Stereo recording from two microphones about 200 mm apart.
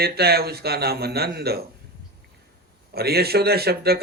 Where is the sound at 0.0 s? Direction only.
50° right (ahead or behind).